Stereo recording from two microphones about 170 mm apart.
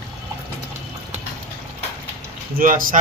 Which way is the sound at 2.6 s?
55° right (ahead or behind).